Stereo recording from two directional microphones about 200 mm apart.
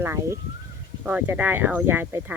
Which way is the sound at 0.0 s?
15° right (ahead or behind).